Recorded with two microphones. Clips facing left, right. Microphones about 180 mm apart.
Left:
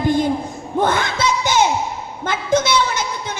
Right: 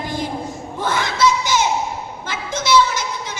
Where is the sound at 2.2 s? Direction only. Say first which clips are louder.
Left 6 dB; 55° left (ahead or behind).